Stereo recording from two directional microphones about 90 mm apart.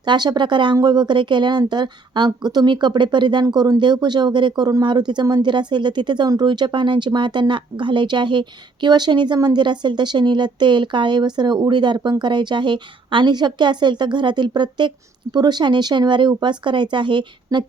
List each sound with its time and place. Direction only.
0.0 s speech: 55° right (ahead or behind)